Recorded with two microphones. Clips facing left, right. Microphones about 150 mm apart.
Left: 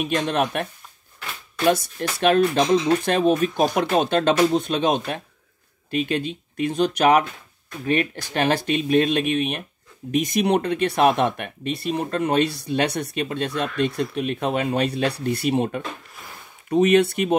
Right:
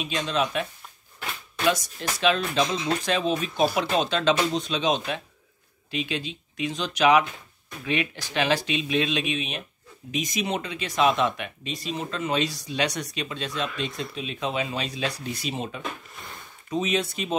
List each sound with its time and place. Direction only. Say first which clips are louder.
0.0 s speech: left 5 dB; 55° left (ahead or behind)
1.7 s speech: left 4 dB; 55° left (ahead or behind)